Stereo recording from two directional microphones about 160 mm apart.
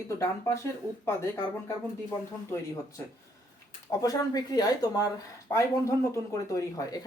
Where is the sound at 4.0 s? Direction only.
25° left (ahead or behind).